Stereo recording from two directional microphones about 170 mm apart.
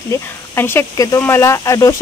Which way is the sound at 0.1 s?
15° left (ahead or behind).